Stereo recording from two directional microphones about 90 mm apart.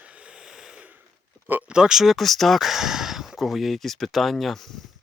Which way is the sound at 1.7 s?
5° right (ahead or behind).